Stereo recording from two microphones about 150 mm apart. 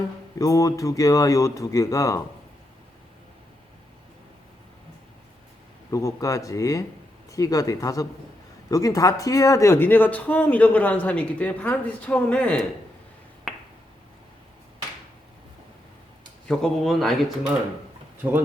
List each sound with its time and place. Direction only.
0.3 s speech: 20° left (ahead or behind)
5.9 s speech: 20° left (ahead or behind)
13.5 s finger snapping: centre (ahead or behind)
16.5 s speech: 5° left (ahead or behind)
18.2 s speech: 15° right (ahead or behind)